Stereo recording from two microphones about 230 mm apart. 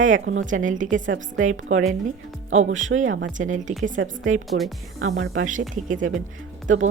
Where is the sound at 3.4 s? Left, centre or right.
Right.